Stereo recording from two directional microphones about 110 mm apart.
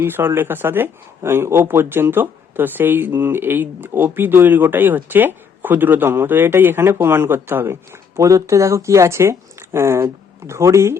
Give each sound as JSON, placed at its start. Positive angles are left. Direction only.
{"t": 0.0, "sound": "speech", "side_deg": -20}